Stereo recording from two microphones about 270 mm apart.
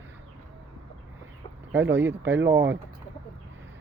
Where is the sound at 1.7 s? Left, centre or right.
Centre.